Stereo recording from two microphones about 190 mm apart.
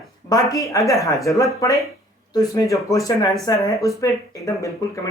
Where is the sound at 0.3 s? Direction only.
15° left (ahead or behind).